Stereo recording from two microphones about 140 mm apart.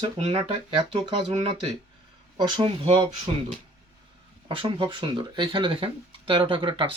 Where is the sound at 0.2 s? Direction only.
40° right (ahead or behind).